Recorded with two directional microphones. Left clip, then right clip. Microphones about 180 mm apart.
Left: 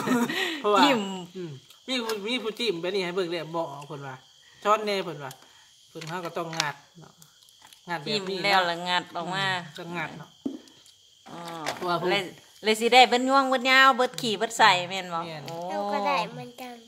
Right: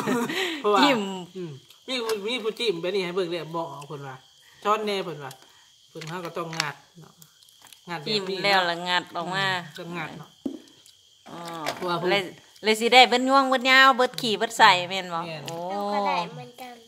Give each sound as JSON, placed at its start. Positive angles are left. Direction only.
{"t": 0.3, "sound": "a sound", "side_deg": -10}
{"t": 0.7, "sound": "a woman's voice", "side_deg": -10}
{"t": 1.4, "sound": "speech", "side_deg": 25}
{"t": 8.0, "sound": "a woman's voice", "side_deg": -10}
{"t": 9.8, "sound": "speech", "side_deg": 30}
{"t": 11.2, "sound": "a woman's voice", "side_deg": -15}
{"t": 11.6, "sound": "speech", "side_deg": 25}
{"t": 12.0, "sound": "a woman's voice", "side_deg": -10}
{"t": 16.1, "sound": "speech", "side_deg": 55}